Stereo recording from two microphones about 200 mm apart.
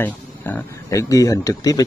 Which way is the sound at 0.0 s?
10° left (ahead or behind).